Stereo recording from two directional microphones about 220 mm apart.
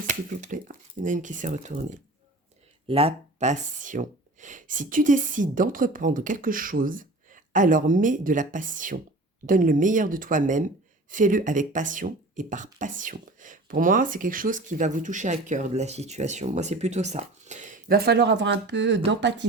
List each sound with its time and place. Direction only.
0.1 s speech: 35° right (ahead or behind); by 19.5 s 55° right (ahead or behind)